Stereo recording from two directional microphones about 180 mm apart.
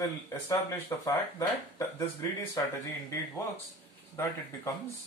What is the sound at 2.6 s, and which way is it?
Speech, 20° left (ahead or behind).